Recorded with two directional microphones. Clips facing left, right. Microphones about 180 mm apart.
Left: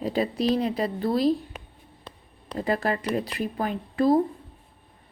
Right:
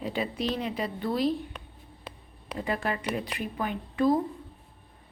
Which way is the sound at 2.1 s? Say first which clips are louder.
Right 1 dB; 10° right (ahead or behind).